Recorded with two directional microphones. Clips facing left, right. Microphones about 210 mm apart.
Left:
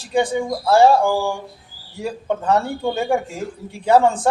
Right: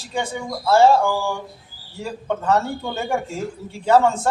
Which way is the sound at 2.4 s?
15° left (ahead or behind).